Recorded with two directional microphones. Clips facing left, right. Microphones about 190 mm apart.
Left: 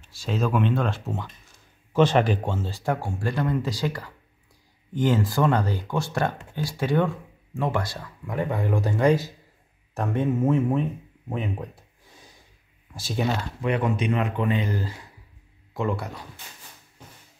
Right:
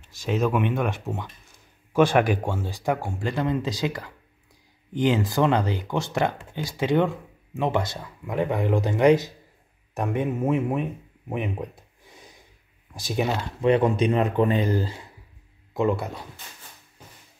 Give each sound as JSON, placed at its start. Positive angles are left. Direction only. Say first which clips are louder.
{"t": 0.1, "sound": "speech", "louder": "right 2 dB", "side_deg": -20}
{"t": 13.7, "sound": "speech", "louder": "right 5 dB", "side_deg": -30}
{"t": 15.7, "sound": "speech", "louder": "right 4 dB", "side_deg": -20}